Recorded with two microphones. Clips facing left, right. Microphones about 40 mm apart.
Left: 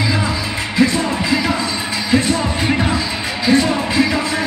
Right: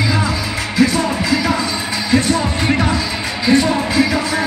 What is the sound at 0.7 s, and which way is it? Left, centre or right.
Music, left.